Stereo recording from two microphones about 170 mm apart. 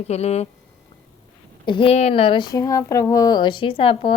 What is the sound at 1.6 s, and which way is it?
Speech, 30° left (ahead or behind).